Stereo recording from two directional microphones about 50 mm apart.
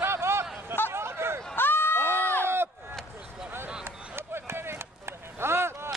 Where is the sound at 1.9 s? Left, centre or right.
Right.